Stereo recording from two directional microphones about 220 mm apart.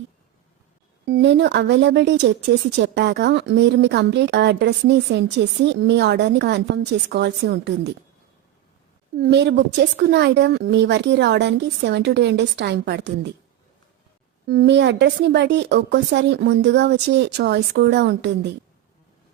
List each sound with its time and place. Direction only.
1.0 s speech: 50° right (ahead or behind)
9.1 s speech: 45° right (ahead or behind)
14.4 s speech: 45° right (ahead or behind)